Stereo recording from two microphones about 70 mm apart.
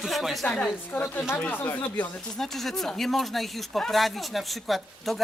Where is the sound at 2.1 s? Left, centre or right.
Centre.